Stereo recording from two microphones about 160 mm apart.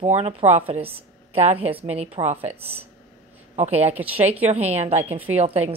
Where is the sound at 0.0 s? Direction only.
40° right (ahead or behind).